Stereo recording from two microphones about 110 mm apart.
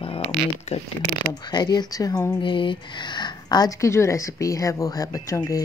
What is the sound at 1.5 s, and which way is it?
Speech, 40° left (ahead or behind).